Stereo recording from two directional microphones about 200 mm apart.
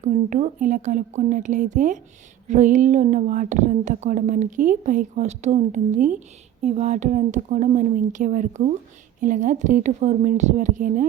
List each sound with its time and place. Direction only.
0.0 s speech: 35° right (ahead or behind)